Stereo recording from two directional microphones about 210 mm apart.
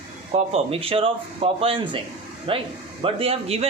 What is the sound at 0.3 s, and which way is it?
A man's voice, 30° right (ahead or behind).